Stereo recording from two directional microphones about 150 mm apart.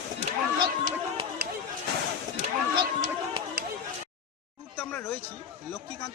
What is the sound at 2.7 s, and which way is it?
Run, 30° right (ahead or behind).